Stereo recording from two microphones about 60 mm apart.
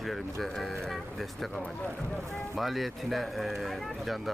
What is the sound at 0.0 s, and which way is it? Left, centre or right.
Speech, centre.